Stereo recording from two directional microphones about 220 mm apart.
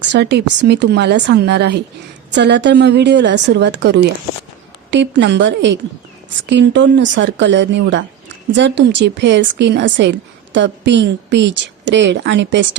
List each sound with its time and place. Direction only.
0.1 s a woman's voice: 50° right (ahead or behind)